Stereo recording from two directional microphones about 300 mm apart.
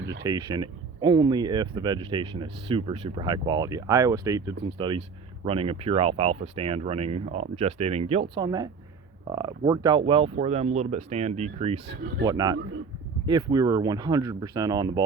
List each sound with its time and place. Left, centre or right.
0.2 s speech: centre